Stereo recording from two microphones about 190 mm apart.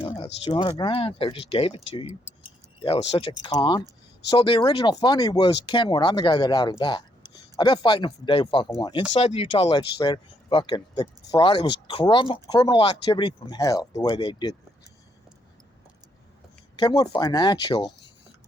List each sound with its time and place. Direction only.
0.0 s a sound: 30° left (ahead or behind)
0.8 s speech: 30° left (ahead or behind)
16.7 s speech: 25° left (ahead or behind)